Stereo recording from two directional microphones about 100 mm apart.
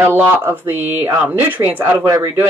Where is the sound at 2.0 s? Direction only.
35° right (ahead or behind).